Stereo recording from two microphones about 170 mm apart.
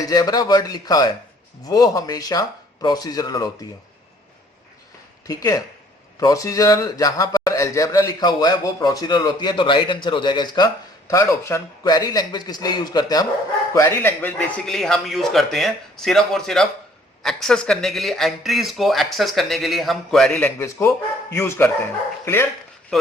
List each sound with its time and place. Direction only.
0.1 s a man's voice: 25° left (ahead or behind)
5.2 s a man's voice: 20° left (ahead or behind); by 20.5 s 5° left (ahead or behind)
20.6 s speech: 20° left (ahead or behind)
22.9 s speech: centre (ahead or behind)